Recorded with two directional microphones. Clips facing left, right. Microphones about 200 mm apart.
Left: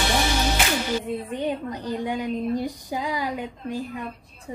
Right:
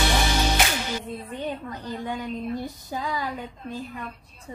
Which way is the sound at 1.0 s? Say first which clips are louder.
Left 5 dB; 15° left (ahead or behind).